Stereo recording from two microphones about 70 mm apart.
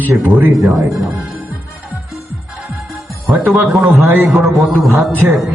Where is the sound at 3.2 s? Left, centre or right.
Centre.